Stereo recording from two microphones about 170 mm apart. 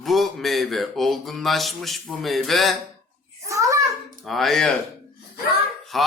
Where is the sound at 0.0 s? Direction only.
Centre (ahead or behind).